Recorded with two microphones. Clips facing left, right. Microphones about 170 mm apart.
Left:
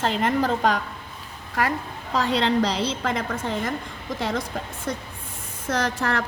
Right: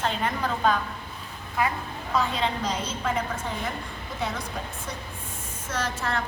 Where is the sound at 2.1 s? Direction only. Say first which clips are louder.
Left 5 dB; 80° left.